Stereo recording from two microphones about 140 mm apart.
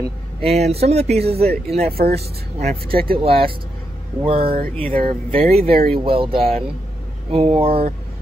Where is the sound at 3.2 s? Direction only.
45° right (ahead or behind).